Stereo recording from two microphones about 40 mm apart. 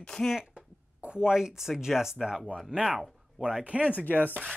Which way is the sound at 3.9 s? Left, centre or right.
Left.